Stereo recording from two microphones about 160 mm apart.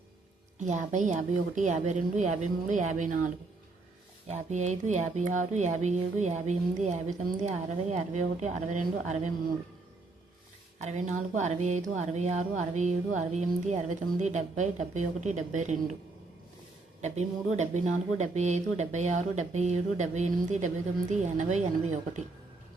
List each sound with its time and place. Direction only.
0.6 s speech: 50° right (ahead or behind)
10.8 s speech: 45° right (ahead or behind)
17.0 s speech: 45° right (ahead or behind)